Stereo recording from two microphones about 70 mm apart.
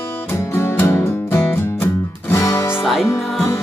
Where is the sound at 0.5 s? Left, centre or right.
Left.